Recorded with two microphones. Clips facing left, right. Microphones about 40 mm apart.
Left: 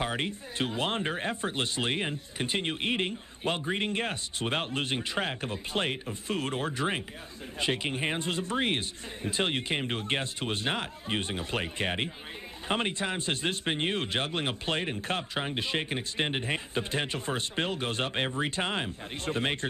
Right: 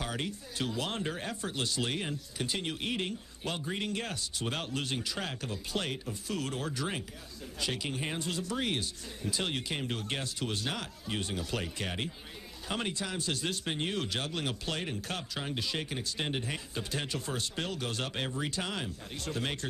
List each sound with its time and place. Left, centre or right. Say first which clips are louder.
0.0 s speech: left 5 dB; left